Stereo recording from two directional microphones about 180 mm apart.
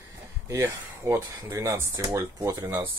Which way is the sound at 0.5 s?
15° right (ahead or behind).